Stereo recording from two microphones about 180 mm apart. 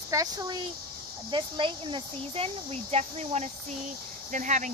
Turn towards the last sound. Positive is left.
turn(degrees=-45)  # may be behind; listen again after turning